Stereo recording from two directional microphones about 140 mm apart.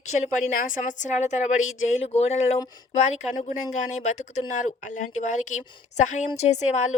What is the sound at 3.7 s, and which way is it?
A woman's voice, 60° left (ahead or behind).